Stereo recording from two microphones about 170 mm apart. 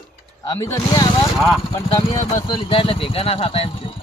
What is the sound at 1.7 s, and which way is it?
Speech, 20° left (ahead or behind).